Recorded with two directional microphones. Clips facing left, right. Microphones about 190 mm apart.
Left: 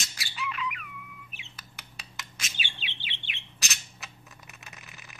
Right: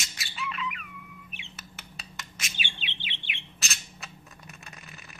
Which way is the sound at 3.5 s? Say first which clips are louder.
Right 1 dB; centre (ahead or behind).